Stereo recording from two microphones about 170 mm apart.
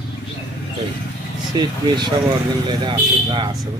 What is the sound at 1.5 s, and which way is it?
Speech, 25° right (ahead or behind).